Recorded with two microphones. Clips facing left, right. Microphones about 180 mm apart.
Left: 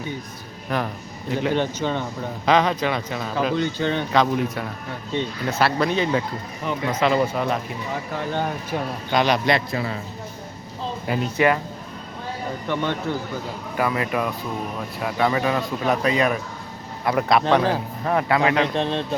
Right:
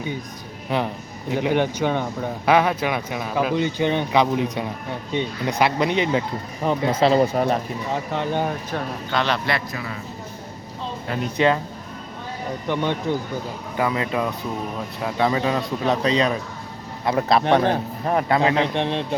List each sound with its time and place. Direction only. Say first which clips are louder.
1.3 s speech: right 2 dB; 15° right (ahead or behind)
6.7 s speech: right 3 dB; 35° right (ahead or behind)
8.7 s speech: left 2 dB; 15° left (ahead or behind); by 10.0 s 30° left (ahead or behind)
11.1 s speech: left 3 dB; 10° left (ahead or behind)
12.6 s a man's voice: right 2 dB; 15° right (ahead or behind)